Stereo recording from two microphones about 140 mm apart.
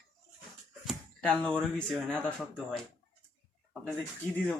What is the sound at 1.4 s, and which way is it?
Speech, 5° left (ahead or behind).